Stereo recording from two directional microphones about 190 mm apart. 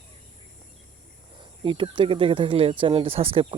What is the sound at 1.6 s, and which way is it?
Speech, 25° right (ahead or behind).